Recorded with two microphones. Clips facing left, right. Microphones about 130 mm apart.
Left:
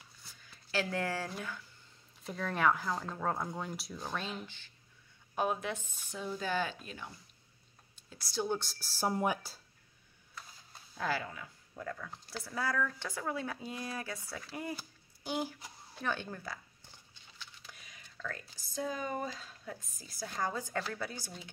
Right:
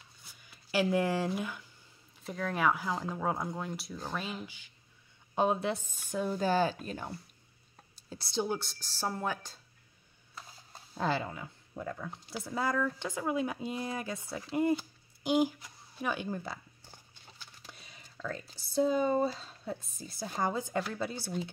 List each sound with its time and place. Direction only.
0.4 s speech: 15° right (ahead or behind)
2.1 s speech: centre (ahead or behind)
5.3 s a woman's voice: 25° right (ahead or behind)
6.1 s speech: 50° right (ahead or behind)
6.4 s a woman's voice: 35° right (ahead or behind)
7.9 s a sound: 30° right (ahead or behind)
8.5 s speech: centre (ahead or behind)
11.0 s speech: 25° right (ahead or behind)
17.6 s speech: 30° right (ahead or behind)